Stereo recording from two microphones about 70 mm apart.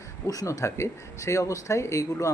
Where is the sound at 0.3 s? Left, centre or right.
Left.